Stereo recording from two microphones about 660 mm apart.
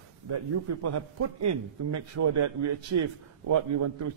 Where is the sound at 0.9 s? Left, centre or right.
Right.